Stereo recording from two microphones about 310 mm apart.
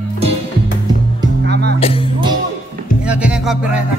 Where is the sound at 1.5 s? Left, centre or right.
Right.